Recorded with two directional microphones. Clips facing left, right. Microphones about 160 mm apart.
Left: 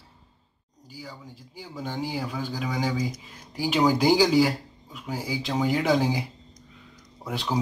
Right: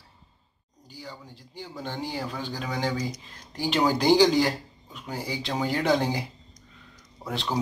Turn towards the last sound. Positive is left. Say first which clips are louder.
# left 1 dB
turn(degrees=5)  # may be behind; listen again after turning